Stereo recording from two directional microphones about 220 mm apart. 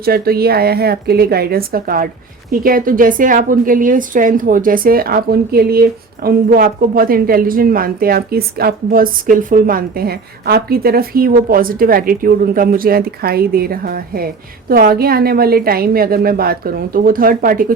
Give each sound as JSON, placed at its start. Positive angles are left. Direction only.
{"t": 0.0, "sound": "a woman's voice", "side_deg": -45}